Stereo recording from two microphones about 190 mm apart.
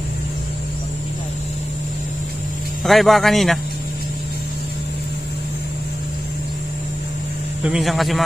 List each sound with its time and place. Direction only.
2.8 s speech: centre (ahead or behind)
7.6 s speech: centre (ahead or behind)